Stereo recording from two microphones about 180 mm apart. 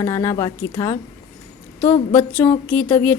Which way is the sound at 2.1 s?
10° left (ahead or behind).